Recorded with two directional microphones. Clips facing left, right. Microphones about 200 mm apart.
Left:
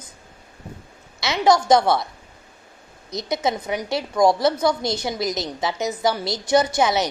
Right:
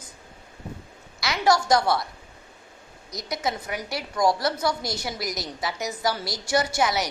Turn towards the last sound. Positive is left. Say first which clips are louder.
# left 5 dB
turn(degrees=25)  # may be behind; listen again after turning